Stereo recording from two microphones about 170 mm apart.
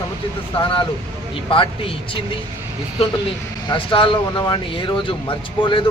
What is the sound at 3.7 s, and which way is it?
Speech, 30° left (ahead or behind).